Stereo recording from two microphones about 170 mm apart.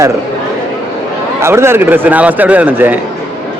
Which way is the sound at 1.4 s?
15° right (ahead or behind).